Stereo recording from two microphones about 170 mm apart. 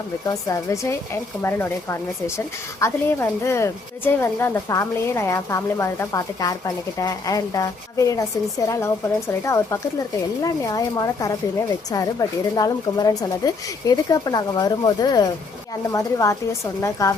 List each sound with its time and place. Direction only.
0.3 s a woman's voice: 20° left (ahead or behind)